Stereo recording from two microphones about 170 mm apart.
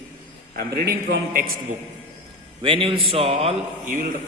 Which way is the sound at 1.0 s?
60° right (ahead or behind).